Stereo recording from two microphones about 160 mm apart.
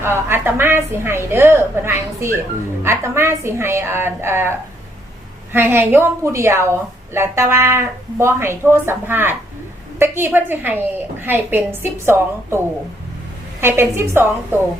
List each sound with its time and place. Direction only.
0.0 s a woman's voice: 15° right (ahead or behind)
5.5 s a woman's voice: 15° right (ahead or behind)
13.6 s a woman's voice: 15° right (ahead or behind)